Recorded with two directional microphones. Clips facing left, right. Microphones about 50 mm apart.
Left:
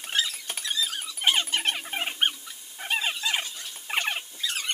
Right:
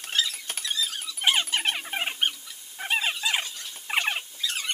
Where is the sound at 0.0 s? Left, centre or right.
Centre.